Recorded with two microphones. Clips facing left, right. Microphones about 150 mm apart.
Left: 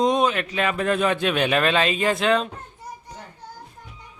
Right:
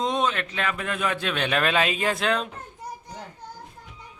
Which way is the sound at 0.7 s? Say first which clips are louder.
Left 7 dB; 35° left (ahead or behind).